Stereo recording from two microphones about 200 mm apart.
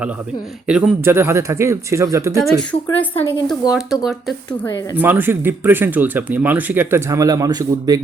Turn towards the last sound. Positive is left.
turn(degrees=-20)  # may be behind; listen again after turning